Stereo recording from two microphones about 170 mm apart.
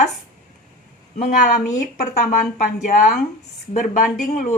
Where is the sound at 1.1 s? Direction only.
45° left (ahead or behind).